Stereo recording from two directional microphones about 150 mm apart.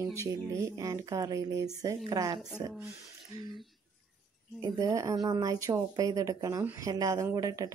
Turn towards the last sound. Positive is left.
turn(degrees=-25)  # may be behind; listen again after turning